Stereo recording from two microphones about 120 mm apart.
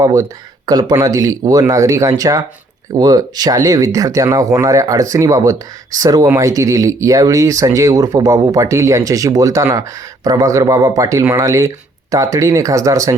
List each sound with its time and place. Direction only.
0.0 s speech: 25° right (ahead or behind)